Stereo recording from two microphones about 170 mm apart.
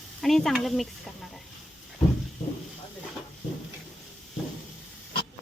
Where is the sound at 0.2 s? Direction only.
Centre (ahead or behind).